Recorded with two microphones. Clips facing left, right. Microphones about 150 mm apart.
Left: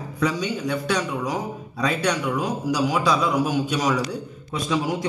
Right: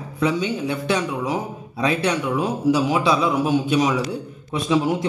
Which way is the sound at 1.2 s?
Centre (ahead or behind).